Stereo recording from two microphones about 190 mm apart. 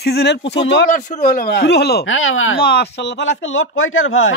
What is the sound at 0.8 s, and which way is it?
Speech, 40° left (ahead or behind).